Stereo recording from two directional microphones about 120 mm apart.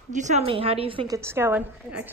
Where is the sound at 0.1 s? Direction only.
90° right.